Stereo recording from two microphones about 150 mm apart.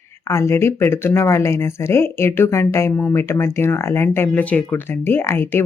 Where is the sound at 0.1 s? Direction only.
20° left (ahead or behind).